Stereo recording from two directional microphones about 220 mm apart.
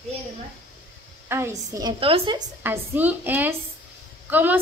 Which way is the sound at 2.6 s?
10° right (ahead or behind).